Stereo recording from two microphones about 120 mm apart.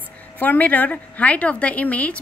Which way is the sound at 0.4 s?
15° left (ahead or behind).